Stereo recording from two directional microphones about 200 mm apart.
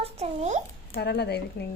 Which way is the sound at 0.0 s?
35° right (ahead or behind).